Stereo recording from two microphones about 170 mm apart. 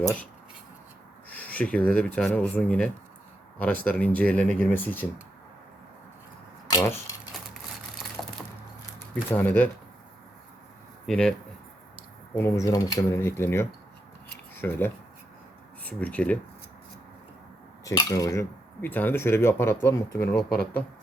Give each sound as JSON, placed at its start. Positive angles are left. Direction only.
{"t": 0.0, "sound": "speech", "side_deg": 15}
{"t": 1.3, "sound": "speech", "side_deg": 10}
{"t": 6.7, "sound": "speech", "side_deg": 20}
{"t": 9.3, "sound": "speech", "side_deg": 10}
{"t": 11.0, "sound": "speech", "side_deg": 5}
{"t": 12.3, "sound": "speech", "side_deg": 15}
{"t": 17.8, "sound": "speech", "side_deg": 20}
{"t": 20.3, "sound": "speech", "side_deg": 65}